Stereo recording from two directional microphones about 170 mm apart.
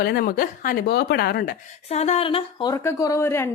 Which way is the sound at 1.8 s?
40° left (ahead or behind).